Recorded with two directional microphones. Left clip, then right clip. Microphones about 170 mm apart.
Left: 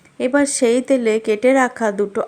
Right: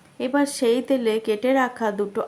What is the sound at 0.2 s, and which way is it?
A woman's voice, 25° left (ahead or behind).